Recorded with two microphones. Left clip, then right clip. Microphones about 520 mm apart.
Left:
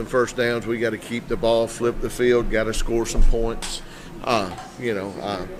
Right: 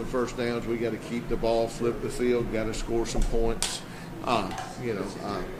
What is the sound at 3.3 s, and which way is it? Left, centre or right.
Speech, left.